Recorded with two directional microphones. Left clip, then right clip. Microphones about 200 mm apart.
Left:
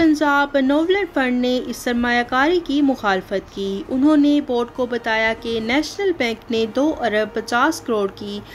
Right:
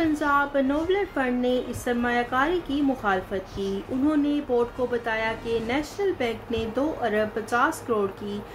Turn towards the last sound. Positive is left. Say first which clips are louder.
# left 5 dB
turn(degrees=50)  # may be behind; listen again after turning